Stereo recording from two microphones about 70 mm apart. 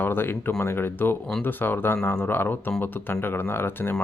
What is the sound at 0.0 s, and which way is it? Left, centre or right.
Speech, left.